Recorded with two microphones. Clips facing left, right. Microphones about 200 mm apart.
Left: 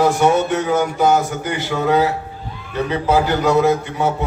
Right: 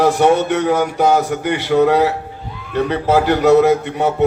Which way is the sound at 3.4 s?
65° right (ahead or behind).